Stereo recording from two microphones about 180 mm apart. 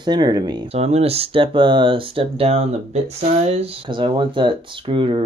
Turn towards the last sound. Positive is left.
turn(degrees=-30)  # may be behind; listen again after turning